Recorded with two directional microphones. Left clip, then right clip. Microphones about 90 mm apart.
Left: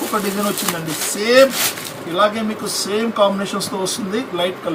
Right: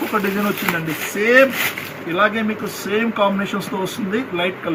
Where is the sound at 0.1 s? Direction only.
30° left (ahead or behind).